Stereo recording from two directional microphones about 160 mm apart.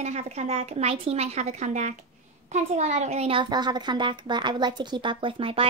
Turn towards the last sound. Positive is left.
turn(degrees=-35)  # may be behind; listen again after turning